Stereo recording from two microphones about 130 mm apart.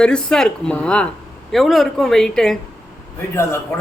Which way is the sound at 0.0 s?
5° left (ahead or behind).